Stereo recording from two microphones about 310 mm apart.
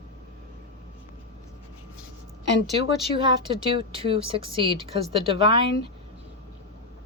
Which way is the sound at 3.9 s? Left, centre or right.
Centre.